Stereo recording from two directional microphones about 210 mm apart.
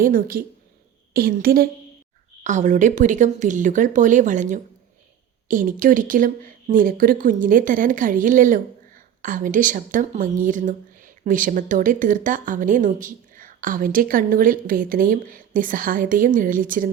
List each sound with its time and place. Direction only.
0.0 s a woman's voice: 40° right (ahead or behind)